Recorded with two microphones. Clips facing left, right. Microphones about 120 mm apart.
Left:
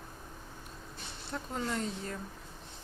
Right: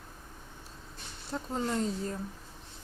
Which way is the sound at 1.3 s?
25° right (ahead or behind).